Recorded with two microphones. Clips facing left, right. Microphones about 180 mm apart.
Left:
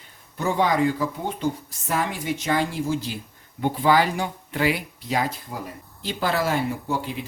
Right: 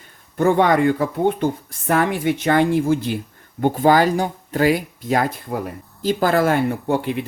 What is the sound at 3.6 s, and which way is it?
Speech, 45° right (ahead or behind).